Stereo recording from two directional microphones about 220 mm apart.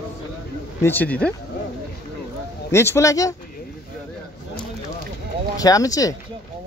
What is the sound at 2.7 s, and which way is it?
Speech, 10° left (ahead or behind).